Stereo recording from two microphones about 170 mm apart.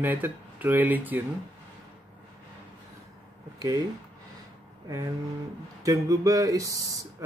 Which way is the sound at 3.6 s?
20° right (ahead or behind).